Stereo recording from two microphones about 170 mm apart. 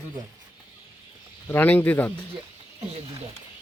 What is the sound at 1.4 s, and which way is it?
Speech, 10° left (ahead or behind).